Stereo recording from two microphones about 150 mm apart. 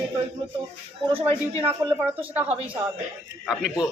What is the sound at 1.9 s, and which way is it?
A man's voice, 10° right (ahead or behind).